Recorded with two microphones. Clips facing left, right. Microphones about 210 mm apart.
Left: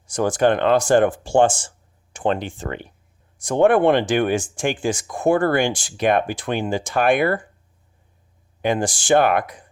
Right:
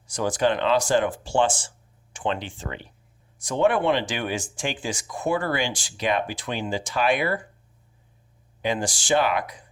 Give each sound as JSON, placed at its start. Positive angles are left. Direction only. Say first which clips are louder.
{"t": 0.1, "sound": "speech", "louder": "left 5 dB", "side_deg": 50}
{"t": 8.6, "sound": "speech", "louder": "left 5 dB", "side_deg": 50}